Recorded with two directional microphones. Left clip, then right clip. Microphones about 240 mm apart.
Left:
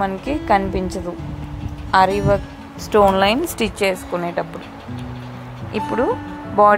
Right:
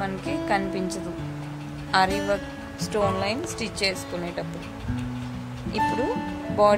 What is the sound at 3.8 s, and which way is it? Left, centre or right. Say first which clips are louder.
Speech: left 6 dB; centre.